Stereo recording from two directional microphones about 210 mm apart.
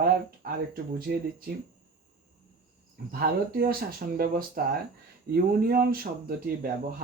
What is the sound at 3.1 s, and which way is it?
Speech, 45° right (ahead or behind).